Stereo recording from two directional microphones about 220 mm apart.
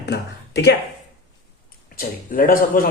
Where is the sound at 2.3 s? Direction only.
40° left (ahead or behind).